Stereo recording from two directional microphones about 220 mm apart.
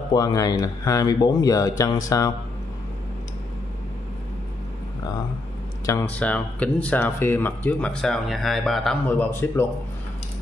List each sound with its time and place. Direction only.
0.1 s speech: 15° left (ahead or behind)
5.9 s speech: 10° left (ahead or behind)